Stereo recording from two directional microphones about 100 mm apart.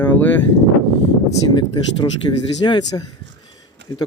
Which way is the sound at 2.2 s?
40° left (ahead or behind).